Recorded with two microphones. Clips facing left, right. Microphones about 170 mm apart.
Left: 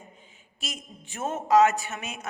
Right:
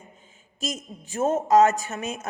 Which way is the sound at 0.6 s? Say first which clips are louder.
Right 7 dB; 40° right (ahead or behind).